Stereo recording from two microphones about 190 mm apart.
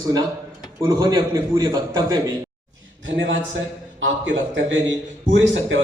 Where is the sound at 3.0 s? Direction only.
75° right (ahead or behind).